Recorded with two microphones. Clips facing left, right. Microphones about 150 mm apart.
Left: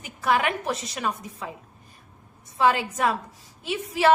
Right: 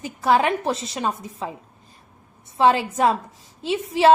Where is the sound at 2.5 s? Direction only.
25° right (ahead or behind).